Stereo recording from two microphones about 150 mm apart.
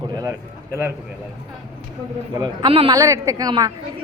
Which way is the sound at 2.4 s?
35° right (ahead or behind).